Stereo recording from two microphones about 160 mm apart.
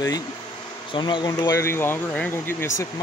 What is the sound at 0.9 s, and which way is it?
Speech, 30° left (ahead or behind).